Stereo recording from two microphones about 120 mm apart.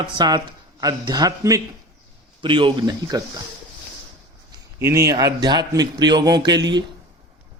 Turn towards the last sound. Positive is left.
turn(degrees=-35)  # may be behind; listen again after turning